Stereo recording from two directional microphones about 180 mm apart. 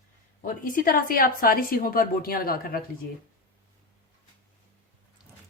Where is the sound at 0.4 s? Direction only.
50° left (ahead or behind).